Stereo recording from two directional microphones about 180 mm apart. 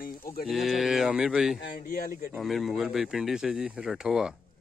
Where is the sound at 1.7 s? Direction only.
55° left (ahead or behind).